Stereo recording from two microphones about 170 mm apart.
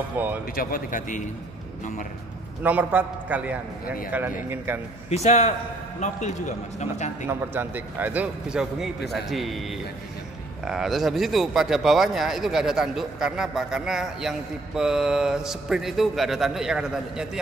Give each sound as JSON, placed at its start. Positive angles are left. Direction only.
{"t": 0.2, "sound": "a man's voice", "side_deg": -10}
{"t": 0.6, "sound": "a man's voice", "side_deg": 55}
{"t": 2.6, "sound": "a man's voice", "side_deg": -10}
{"t": 5.1, "sound": "a man's voice", "side_deg": 40}
{"t": 7.2, "sound": "a man's voice", "side_deg": -10}